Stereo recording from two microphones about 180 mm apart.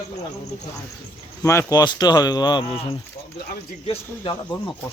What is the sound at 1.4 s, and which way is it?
Speech, 20° left (ahead or behind).